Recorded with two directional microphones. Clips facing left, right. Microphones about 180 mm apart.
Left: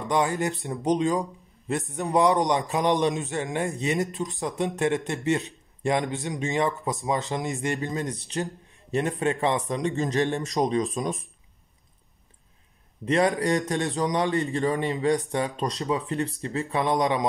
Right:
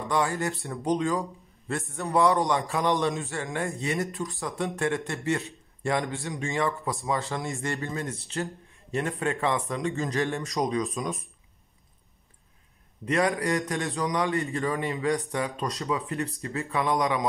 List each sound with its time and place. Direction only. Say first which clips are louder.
0.1 s a man's voice: left 3 dB; 20° left (ahead or behind)
13.0 s a man's voice: left 3 dB; 25° left (ahead or behind)